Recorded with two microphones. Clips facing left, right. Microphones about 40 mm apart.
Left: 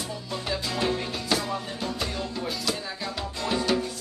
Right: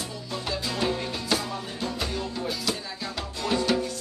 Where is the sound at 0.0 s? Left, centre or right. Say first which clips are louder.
Even; centre.